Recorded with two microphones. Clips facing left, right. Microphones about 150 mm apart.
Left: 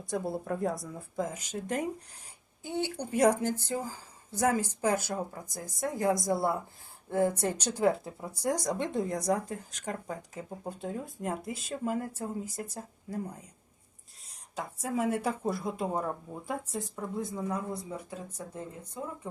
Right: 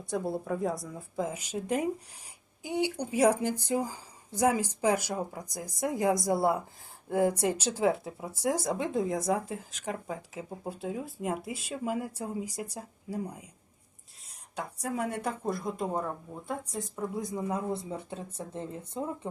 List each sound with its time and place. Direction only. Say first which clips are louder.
0.0 s speech: right 1 dB; centre (ahead or behind)
14.3 s speech: even; centre (ahead or behind)
17.2 s speech: even; 20° right (ahead or behind)